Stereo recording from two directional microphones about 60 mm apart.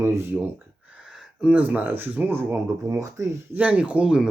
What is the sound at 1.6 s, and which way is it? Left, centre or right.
Speech, right.